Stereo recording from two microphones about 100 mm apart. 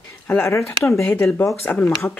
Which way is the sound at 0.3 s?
25° left (ahead or behind).